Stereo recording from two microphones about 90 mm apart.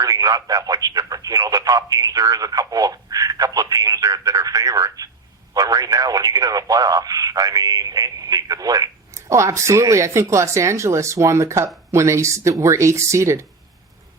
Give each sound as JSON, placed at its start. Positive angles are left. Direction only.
{"t": 0.0, "sound": "speech", "side_deg": -40}